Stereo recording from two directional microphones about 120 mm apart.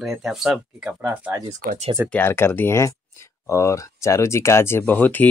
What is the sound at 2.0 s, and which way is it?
Speech, 15° left (ahead or behind).